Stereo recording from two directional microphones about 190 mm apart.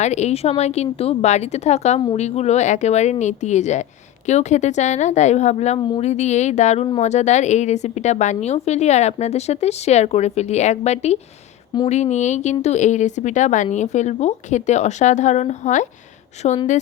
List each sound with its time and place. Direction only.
0.0 s a woman's voice: 35° left (ahead or behind)